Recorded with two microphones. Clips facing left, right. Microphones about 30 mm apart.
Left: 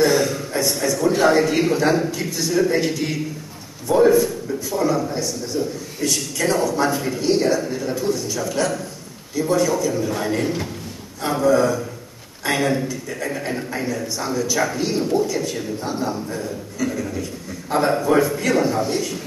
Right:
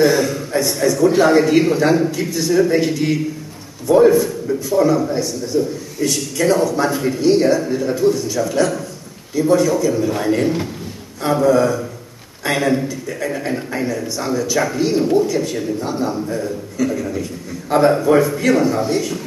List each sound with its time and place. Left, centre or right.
0.0 s a man's voice: centre